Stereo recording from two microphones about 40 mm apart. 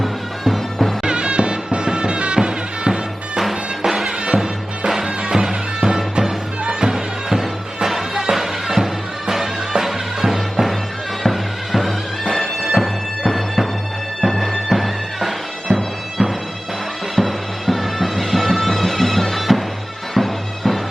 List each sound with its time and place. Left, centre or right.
0.0 s music: centre
1.0 s music: right
3.5 s music: centre
6.9 s music: centre
20.1 s bagpipes: centre